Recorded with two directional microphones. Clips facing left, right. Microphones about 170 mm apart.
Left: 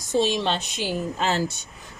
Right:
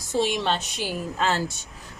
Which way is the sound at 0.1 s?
25° left (ahead or behind).